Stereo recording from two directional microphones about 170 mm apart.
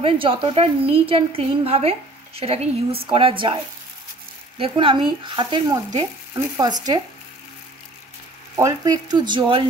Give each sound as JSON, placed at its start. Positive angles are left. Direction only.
{"t": 0.0, "sound": "a woman's voice", "side_deg": -30}
{"t": 4.6, "sound": "speech", "side_deg": -30}
{"t": 8.5, "sound": "speech", "side_deg": -20}